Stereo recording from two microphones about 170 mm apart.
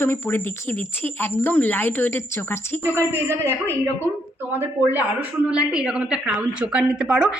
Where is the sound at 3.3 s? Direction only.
15° right (ahead or behind).